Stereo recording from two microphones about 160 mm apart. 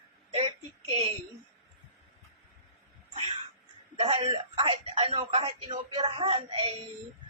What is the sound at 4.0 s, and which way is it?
Speech, 35° right (ahead or behind).